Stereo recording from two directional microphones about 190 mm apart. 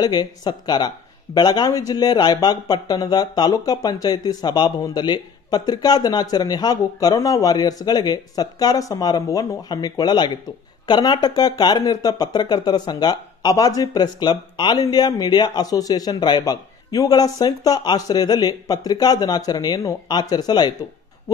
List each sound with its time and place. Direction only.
0.0 s speech: 20° left (ahead or behind)